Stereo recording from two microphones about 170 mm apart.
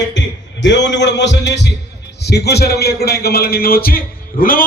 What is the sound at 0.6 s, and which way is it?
A man's voice, 90° left.